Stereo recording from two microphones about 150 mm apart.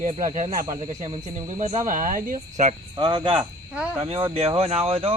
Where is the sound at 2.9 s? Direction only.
30° right (ahead or behind).